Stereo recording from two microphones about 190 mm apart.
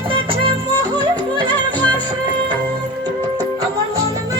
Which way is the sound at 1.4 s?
10° left (ahead or behind).